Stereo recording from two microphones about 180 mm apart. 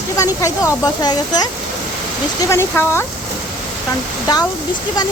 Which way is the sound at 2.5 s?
15° left (ahead or behind).